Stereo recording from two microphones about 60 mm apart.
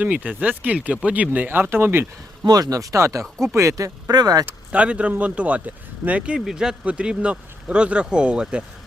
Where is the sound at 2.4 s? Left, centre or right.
Right.